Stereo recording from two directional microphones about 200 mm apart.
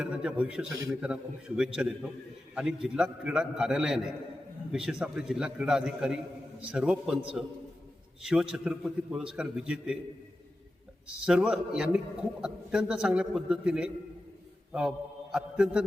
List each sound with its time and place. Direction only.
0.0 s a man's voice: 5° right (ahead or behind)
8.2 s a man's voice: 5° right (ahead or behind)
11.3 s a man's voice: 5° right (ahead or behind)